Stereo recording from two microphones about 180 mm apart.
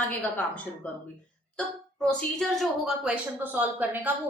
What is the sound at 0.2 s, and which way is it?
A woman's voice, 10° left (ahead or behind).